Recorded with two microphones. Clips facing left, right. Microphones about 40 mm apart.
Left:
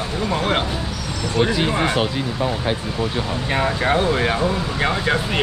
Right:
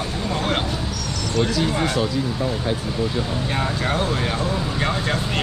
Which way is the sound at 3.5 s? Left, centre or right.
Left.